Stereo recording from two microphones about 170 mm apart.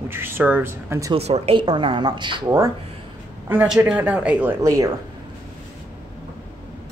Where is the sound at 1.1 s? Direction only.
40° right (ahead or behind).